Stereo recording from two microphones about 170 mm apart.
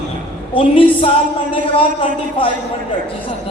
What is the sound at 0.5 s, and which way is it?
Speech, 30° left (ahead or behind).